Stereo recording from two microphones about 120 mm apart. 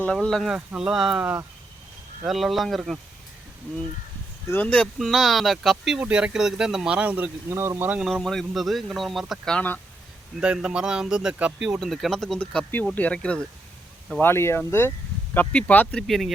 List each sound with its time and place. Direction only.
0.0 s speech: 5° left (ahead or behind)
4.4 s speech: 15° left (ahead or behind)
4.9 s speech: centre (ahead or behind); by 8.0 s 15° right (ahead or behind)
8.0 s speech: 5° left (ahead or behind)
10.4 s speech: 10° right (ahead or behind); by 13.4 s 10° left (ahead or behind)
14.2 s speech: 20° left (ahead or behind); by 16.3 s centre (ahead or behind)